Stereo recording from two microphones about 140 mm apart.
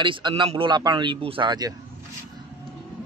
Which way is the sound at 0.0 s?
35° right (ahead or behind).